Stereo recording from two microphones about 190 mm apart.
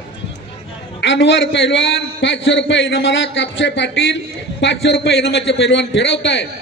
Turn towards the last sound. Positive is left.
turn(degrees=70)  # may be behind; listen again after turning